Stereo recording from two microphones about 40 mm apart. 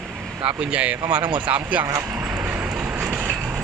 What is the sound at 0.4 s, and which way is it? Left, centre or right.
Speech, right.